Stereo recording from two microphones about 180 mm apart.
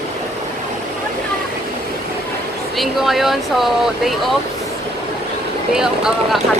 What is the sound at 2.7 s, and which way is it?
Speech, centre (ahead or behind).